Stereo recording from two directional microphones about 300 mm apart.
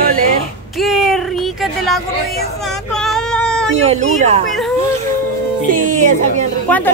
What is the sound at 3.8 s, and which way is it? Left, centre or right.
Speech, right.